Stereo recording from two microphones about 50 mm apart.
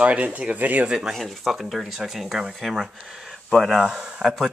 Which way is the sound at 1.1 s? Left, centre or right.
Centre.